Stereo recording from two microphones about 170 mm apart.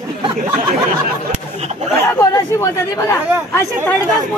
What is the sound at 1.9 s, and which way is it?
Speech, 15° left (ahead or behind).